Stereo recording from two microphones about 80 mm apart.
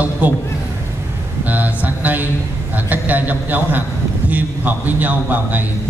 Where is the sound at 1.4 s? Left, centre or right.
Right.